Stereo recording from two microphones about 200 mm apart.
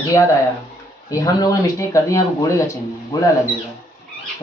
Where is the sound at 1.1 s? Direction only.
15° left (ahead or behind).